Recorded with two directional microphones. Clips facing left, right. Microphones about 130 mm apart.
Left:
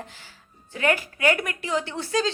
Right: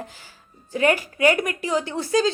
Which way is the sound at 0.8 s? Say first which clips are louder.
Right 4 dB; 20° right (ahead or behind).